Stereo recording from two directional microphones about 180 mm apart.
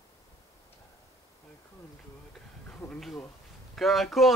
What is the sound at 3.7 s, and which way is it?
Speech, centre (ahead or behind).